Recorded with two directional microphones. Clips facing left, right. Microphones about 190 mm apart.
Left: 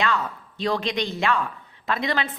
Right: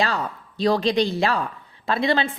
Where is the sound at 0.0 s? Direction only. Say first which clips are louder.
Right 1 dB; 35° right (ahead or behind).